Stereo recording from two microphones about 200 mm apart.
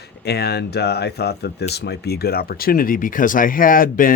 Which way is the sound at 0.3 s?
55° left (ahead or behind).